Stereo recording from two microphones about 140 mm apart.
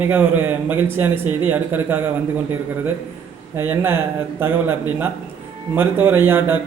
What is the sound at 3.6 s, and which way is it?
A man's voice, 15° right (ahead or behind).